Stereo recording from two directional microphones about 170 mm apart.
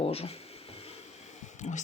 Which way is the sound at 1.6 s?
45° left (ahead or behind).